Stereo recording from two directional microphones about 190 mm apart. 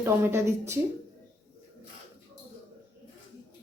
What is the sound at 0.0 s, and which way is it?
Speech, 15° right (ahead or behind).